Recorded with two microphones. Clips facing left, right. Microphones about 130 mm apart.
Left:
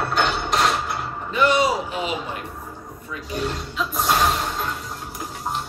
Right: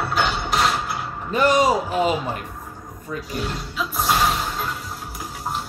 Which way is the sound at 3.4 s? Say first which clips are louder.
Left 1 dB; centre (ahead or behind).